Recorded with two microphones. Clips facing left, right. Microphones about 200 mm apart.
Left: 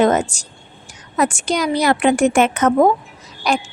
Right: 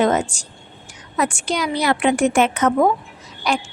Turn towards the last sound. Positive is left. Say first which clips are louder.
# left 2 dB
turn(degrees=45)  # may be behind; listen again after turning